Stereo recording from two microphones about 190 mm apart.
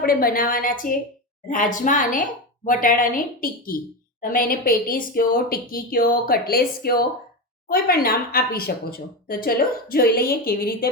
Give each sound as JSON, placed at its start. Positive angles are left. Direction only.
{"t": 0.0, "sound": "a woman's voice", "side_deg": 50}